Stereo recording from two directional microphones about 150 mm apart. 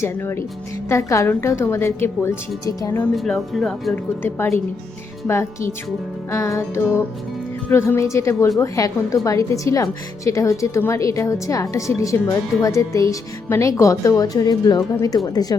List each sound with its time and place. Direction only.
0.0 s a woman's voice: 15° left (ahead or behind)
3.2 s speech: centre (ahead or behind)
4.2 s a woman's voice: 15° left (ahead or behind)